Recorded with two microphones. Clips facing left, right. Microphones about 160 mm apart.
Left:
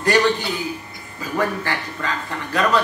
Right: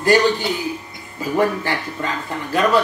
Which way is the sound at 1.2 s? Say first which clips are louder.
Right 4 dB; 25° right (ahead or behind).